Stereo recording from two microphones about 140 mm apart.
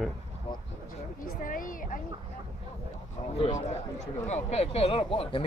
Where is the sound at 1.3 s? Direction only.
75° left (ahead or behind).